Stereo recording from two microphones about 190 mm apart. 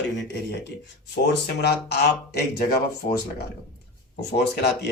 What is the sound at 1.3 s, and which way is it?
Speech, 60° left (ahead or behind).